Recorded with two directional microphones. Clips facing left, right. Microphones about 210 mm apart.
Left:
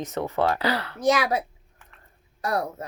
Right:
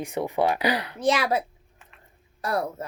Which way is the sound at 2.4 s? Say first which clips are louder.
Even; 30° right (ahead or behind).